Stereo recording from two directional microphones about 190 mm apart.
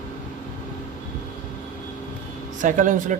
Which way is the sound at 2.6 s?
45° right (ahead or behind).